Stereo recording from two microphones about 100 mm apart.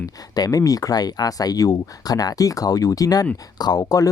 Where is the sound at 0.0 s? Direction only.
40° left (ahead or behind).